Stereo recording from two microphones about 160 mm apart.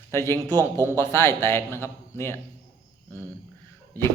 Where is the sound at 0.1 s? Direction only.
15° left (ahead or behind).